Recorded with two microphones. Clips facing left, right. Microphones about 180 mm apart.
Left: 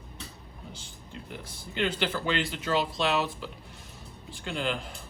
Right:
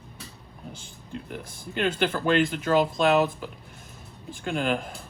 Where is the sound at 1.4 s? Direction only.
50° right (ahead or behind).